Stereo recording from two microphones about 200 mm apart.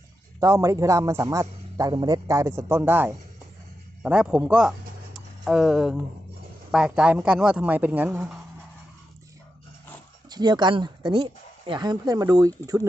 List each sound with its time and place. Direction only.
0.3 s a man's voice: 15° right (ahead or behind)
5.1 s a sound: centre (ahead or behind)
6.7 s speech: 5° right (ahead or behind)
10.2 s speech: 20° right (ahead or behind)